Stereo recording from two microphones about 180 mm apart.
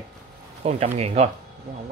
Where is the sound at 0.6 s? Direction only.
35° right (ahead or behind).